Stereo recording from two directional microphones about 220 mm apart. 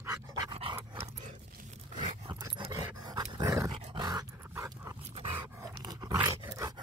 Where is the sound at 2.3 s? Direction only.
20° right (ahead or behind).